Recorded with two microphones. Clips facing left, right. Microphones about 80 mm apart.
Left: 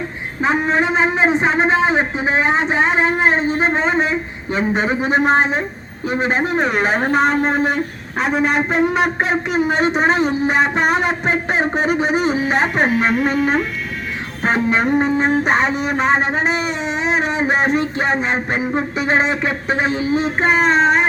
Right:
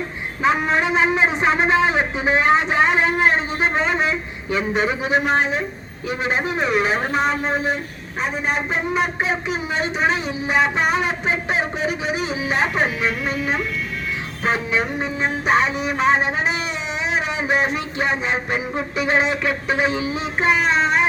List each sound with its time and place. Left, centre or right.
0.4 s a man's voice: left
8.2 s a man's voice: left